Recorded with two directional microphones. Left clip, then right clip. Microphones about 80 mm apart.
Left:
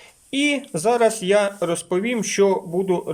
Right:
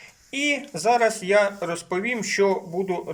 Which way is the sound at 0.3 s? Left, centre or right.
Left.